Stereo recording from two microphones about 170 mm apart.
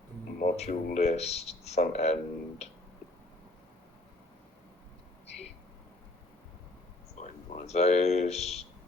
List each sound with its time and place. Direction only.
0.3 s music: 45° left (ahead or behind)
0.9 s speech: 40° left (ahead or behind)
7.2 s speech: 40° left (ahead or behind)